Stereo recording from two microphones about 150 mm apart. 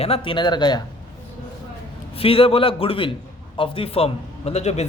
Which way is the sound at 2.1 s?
40° left (ahead or behind).